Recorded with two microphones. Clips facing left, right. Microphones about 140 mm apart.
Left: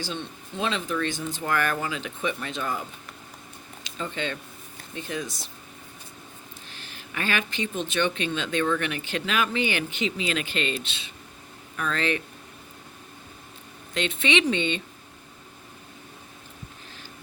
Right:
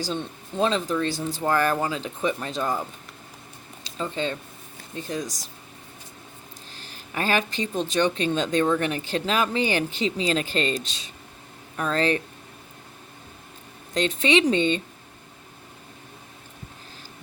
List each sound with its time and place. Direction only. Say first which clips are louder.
0.0 s speech: right 4 dB; 40° right (ahead or behind)
3.8 s speech: right 3 dB; 35° right (ahead or behind)
6.7 s speech: right 4 dB; 40° right (ahead or behind)
13.9 s speech: right 4 dB; 40° right (ahead or behind)